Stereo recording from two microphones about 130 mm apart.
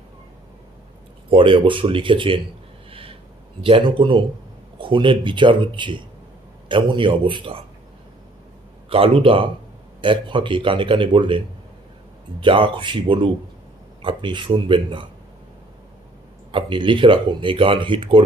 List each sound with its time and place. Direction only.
1.3 s speech: 40° right (ahead or behind)
2.9 s a sound: 45° right (ahead or behind)
3.6 s speech: 40° right (ahead or behind)
8.9 s a man's voice: 45° right (ahead or behind)
16.5 s speech: 40° right (ahead or behind)